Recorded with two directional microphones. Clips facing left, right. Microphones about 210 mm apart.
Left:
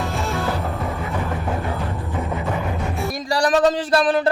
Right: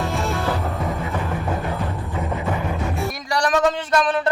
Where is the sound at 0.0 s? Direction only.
Centre (ahead or behind).